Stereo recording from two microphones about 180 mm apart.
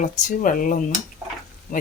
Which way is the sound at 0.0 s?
45° left (ahead or behind).